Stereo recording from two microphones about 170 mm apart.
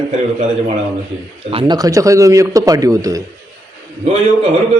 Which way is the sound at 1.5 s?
30° right (ahead or behind).